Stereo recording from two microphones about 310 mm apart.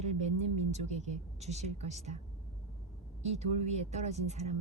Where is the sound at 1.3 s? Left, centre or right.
Right.